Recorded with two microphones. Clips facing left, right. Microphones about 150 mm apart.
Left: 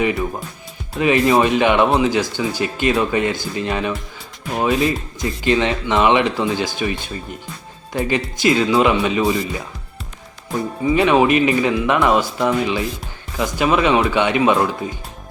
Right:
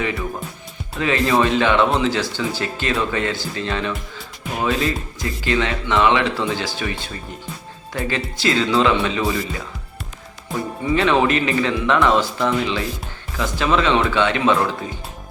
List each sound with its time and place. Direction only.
0.9 s speech: 15° left (ahead or behind)
10.8 s speech: 15° left (ahead or behind)